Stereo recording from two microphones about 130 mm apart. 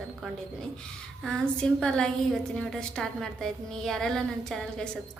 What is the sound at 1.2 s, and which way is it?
A woman's voice, 5° left (ahead or behind).